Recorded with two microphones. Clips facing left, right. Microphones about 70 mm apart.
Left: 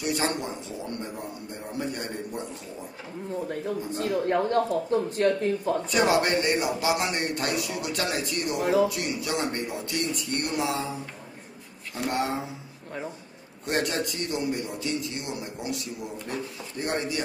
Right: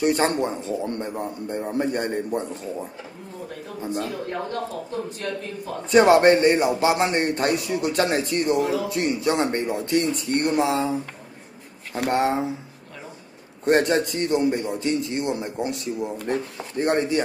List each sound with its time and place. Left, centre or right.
0.0 s speech: right
3.8 s speech: right
4.3 s speech: left
5.9 s speech: right
12.1 s speech: right
13.7 s speech: right